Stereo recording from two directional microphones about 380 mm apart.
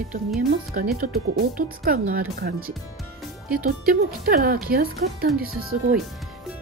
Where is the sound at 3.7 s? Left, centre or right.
Right.